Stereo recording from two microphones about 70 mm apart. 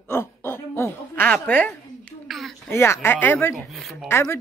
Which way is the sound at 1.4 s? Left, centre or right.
Left.